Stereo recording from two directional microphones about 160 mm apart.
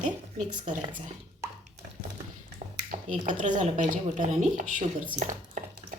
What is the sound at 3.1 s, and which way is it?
Speech, 50° right (ahead or behind).